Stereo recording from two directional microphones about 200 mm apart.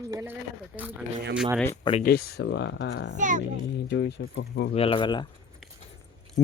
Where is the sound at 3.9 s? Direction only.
60° left (ahead or behind).